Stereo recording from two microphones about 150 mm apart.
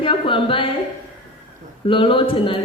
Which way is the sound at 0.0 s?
35° left (ahead or behind).